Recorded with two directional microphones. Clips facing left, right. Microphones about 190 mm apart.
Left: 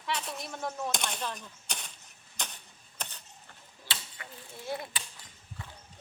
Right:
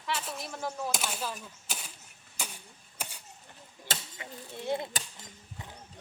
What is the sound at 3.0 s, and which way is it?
Mechanisms, 10° right (ahead or behind).